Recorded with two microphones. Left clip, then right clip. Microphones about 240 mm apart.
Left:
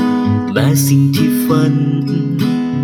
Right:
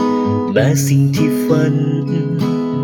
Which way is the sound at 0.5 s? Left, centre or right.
Centre.